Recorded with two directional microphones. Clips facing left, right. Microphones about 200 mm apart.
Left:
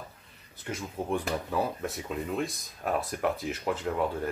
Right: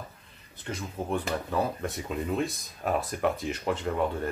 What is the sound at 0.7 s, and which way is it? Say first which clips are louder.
Speech: even; 10° left (ahead or behind).